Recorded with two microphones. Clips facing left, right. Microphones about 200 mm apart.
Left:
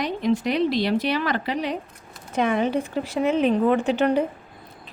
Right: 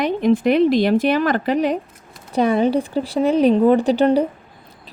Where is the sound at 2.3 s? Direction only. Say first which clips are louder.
Right 5 dB; 35° right (ahead or behind).